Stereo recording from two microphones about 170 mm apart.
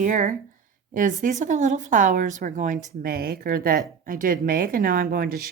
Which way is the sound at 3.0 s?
60° right (ahead or behind).